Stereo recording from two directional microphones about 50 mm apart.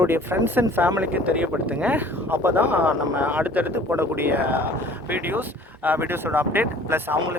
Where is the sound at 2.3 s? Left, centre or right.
Right.